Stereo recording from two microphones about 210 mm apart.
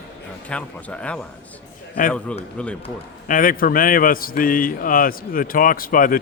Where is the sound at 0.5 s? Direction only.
5° left (ahead or behind).